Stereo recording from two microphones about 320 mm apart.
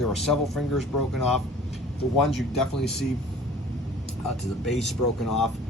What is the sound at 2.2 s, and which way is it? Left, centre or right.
Speech, centre.